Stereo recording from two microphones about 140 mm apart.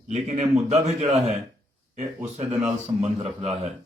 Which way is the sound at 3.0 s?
50° right (ahead or behind).